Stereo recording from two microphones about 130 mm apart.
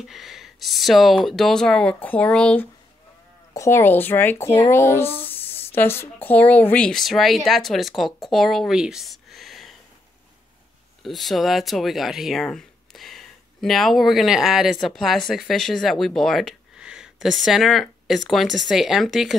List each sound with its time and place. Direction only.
0.0 s speech: centre (ahead or behind)
11.0 s speech: centre (ahead or behind)